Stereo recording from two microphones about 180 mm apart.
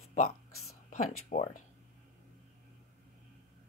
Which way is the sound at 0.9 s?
45° left (ahead or behind).